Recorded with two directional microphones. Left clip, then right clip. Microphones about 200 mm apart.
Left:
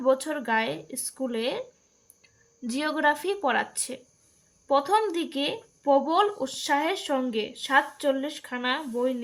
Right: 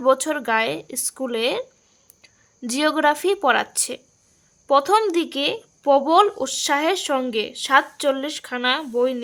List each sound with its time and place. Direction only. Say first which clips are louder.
0.0 s speech: right 6 dB; 40° right (ahead or behind)